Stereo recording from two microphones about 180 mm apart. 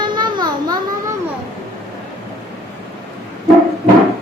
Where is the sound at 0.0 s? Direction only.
25° right (ahead or behind).